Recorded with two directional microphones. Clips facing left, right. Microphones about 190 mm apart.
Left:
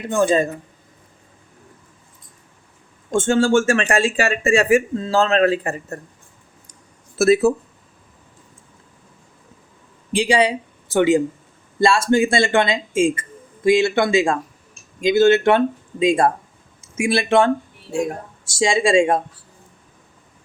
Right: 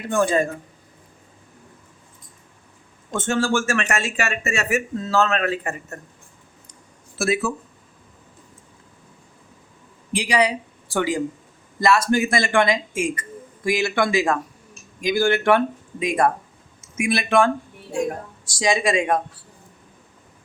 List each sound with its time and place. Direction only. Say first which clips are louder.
0.1 s speech: left 3 dB; 20° left (ahead or behind)
3.2 s speech: left 6 dB; 25° left (ahead or behind)
7.2 s speech: left 8 dB; 40° left (ahead or behind)
10.1 s speech: left 3 dB; 25° left (ahead or behind)